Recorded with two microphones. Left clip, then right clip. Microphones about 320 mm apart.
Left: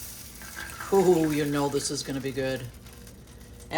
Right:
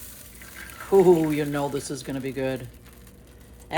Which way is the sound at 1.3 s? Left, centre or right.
Right.